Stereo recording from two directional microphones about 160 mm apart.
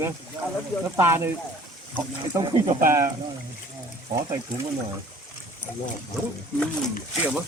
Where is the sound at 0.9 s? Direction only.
15° right (ahead or behind).